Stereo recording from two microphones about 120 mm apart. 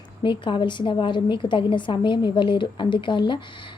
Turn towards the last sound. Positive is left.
turn(degrees=40)  # may be behind; listen again after turning